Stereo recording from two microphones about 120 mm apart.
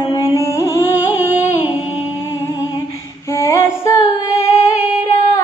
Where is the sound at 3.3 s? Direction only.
25° left (ahead or behind).